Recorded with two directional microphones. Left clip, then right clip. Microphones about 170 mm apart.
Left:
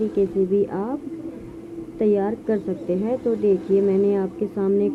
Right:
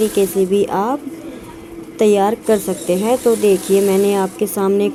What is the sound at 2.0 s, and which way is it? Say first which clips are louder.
A woman's voice: right 8 dB; 25° right (ahead or behind).